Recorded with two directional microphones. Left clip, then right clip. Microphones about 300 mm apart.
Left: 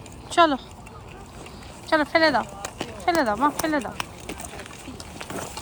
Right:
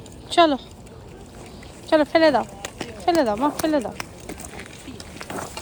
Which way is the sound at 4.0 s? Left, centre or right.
Centre.